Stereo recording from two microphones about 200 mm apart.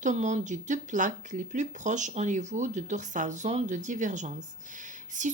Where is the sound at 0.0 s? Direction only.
35° right (ahead or behind).